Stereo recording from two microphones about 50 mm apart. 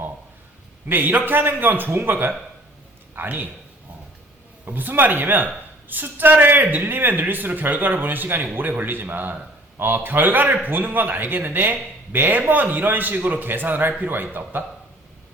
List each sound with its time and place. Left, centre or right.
0.9 s a man's voice: right
4.6 s a man's voice: right